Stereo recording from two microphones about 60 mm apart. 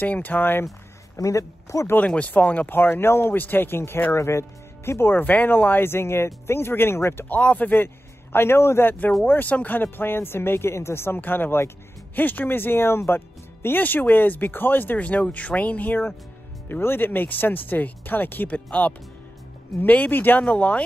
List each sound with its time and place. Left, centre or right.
0.0 s speech: left
1.1 s a man's voice: left
2.0 s speech: left
7.2 s a man's voice: left
9.2 s speech: left
11.1 s speech: left; by 20.8 s centre